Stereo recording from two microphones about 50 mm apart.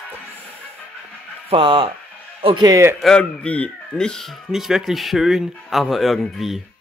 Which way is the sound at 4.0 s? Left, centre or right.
Centre.